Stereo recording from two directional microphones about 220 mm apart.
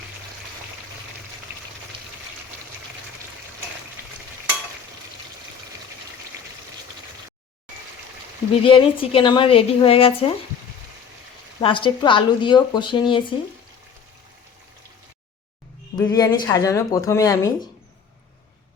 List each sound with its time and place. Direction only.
8.6 s a woman's voice: 25° left (ahead or behind)
11.6 s a woman's voice: 20° left (ahead or behind)
16.0 s speech: 15° left (ahead or behind)